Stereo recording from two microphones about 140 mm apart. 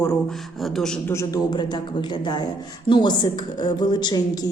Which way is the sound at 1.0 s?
25° left (ahead or behind).